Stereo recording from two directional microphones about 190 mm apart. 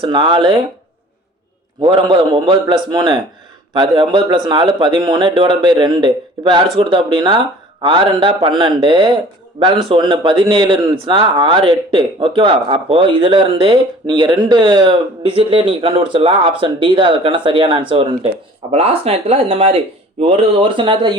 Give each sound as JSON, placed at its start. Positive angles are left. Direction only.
{"t": 0.0, "sound": "speech", "side_deg": -25}
{"t": 1.8, "sound": "speech", "side_deg": -25}